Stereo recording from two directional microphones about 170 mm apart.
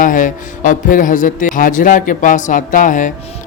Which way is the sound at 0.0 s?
50° left (ahead or behind).